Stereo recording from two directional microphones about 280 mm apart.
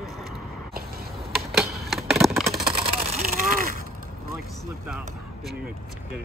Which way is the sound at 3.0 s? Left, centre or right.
Right.